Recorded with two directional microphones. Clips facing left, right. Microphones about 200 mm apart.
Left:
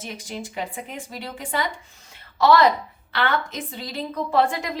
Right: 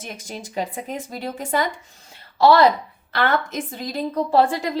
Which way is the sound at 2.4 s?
30° right (ahead or behind).